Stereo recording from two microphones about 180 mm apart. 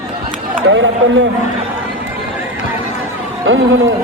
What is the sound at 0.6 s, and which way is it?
Speech, 90° right.